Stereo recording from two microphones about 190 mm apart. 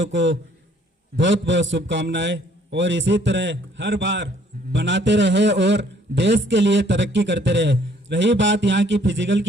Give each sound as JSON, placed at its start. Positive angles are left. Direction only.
{"t": 0.0, "sound": "a man's voice", "side_deg": -75}